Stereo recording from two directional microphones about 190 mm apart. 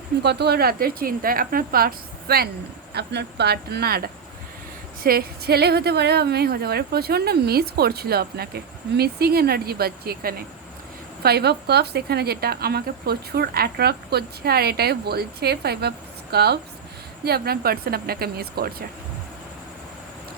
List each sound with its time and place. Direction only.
0.2 s speech: 60° right (ahead or behind)